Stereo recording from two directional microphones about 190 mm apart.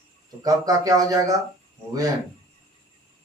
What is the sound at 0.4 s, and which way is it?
Speech, 20° right (ahead or behind).